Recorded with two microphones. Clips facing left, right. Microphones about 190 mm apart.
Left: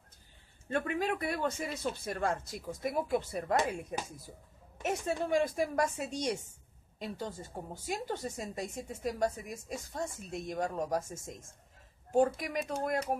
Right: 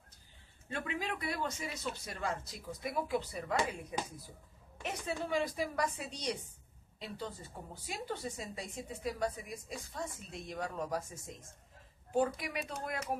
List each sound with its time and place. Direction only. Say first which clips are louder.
0.7 s a woman's voice: left 6 dB; 50° left (ahead or behind)
12.4 s a woman's voice: left 5 dB; 45° left (ahead or behind)